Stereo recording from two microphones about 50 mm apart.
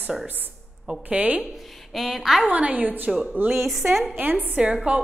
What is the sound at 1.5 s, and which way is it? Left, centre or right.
A woman's voice, centre.